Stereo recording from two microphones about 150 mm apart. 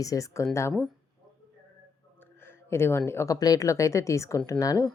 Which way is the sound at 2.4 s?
15° left (ahead or behind).